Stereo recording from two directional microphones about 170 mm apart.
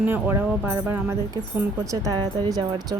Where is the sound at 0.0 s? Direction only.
10° right (ahead or behind).